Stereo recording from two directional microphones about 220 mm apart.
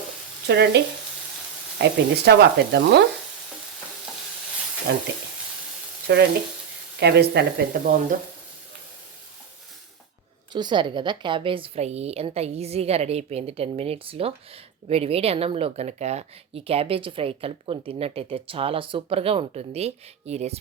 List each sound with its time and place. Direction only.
0.4 s frying: 50° right (ahead or behind)
1.8 s frying: 50° right (ahead or behind)
4.9 s frying: 45° right (ahead or behind)
6.1 s frying: 50° right (ahead or behind)
10.5 s a woman's voice: 20° right (ahead or behind)